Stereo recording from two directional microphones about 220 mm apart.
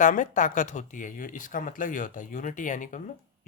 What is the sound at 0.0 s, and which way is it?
Speech, 35° left (ahead or behind).